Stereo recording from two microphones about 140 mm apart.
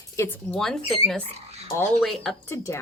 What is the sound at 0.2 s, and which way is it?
Speech, 15° left (ahead or behind).